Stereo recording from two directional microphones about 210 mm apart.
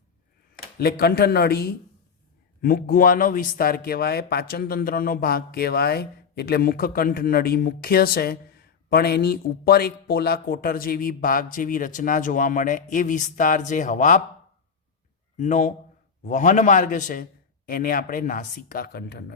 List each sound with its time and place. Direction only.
0.8 s speech: 45° left (ahead or behind)
15.4 s a man's voice: 35° left (ahead or behind)